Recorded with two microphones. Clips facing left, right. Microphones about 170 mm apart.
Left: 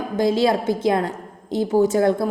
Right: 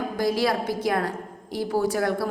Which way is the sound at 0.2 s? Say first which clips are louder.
Left 6 dB; 25° left (ahead or behind).